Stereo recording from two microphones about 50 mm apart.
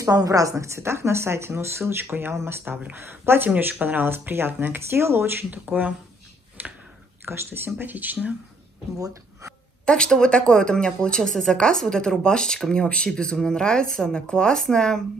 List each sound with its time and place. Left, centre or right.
0.6 s speech: right
4.3 s speech: right
4.7 s speech: right
5.5 s speech: right
6.6 s a sound: right
7.2 s speech: right
7.7 s speech: right
9.8 s speech: centre